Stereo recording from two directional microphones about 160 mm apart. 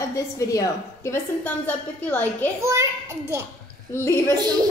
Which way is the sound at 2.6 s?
20° right (ahead or behind).